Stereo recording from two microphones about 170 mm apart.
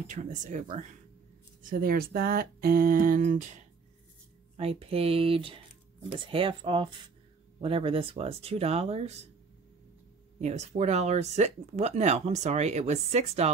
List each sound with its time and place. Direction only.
0.1 s speech: 45° right (ahead or behind)
1.6 s speech: 55° right (ahead or behind)
4.6 s speech: 35° right (ahead or behind)
10.4 s speech: 40° right (ahead or behind)